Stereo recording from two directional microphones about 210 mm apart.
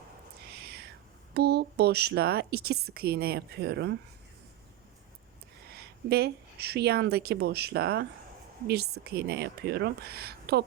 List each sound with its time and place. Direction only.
1.3 s a woman's voice: 50° right (ahead or behind)
5.7 s a woman's voice: 50° right (ahead or behind)